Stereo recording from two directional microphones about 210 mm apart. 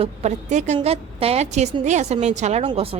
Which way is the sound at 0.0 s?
30° right (ahead or behind).